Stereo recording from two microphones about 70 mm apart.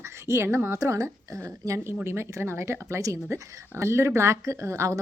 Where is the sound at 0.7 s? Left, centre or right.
Right.